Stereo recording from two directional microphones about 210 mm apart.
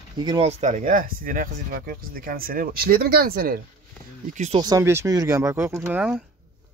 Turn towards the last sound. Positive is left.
turn(degrees=-5)  # may be behind; listen again after turning